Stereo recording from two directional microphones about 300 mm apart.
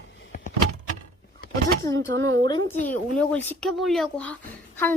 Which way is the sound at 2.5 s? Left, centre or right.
Centre.